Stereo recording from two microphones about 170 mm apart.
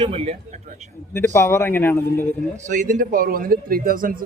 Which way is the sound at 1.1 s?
15° left (ahead or behind).